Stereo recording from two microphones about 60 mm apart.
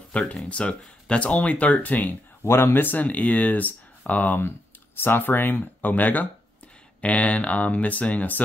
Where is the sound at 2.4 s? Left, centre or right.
Left.